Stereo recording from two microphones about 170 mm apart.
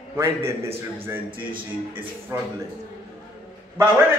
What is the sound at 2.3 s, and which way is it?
Speech, 15° right (ahead or behind).